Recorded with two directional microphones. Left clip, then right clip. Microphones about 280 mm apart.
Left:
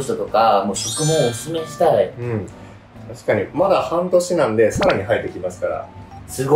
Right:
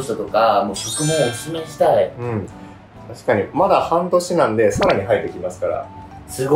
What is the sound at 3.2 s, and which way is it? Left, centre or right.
Speech, centre.